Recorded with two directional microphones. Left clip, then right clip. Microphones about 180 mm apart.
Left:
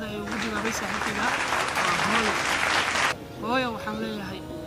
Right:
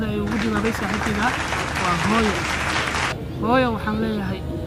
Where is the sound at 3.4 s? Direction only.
5° right (ahead or behind).